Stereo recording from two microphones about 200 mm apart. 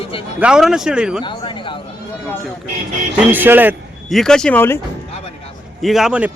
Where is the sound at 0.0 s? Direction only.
25° left (ahead or behind).